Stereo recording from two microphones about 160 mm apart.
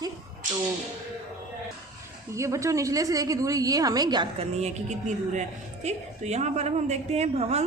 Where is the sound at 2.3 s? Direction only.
20° right (ahead or behind).